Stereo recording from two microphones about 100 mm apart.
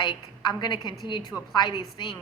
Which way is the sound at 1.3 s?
10° left (ahead or behind).